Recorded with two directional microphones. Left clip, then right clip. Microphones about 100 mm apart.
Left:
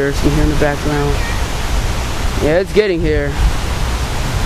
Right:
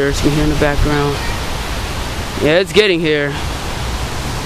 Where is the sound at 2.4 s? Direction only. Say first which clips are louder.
Right 2 dB; 20° right (ahead or behind).